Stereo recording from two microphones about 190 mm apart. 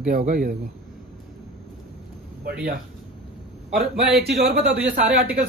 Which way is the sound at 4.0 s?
Centre (ahead or behind).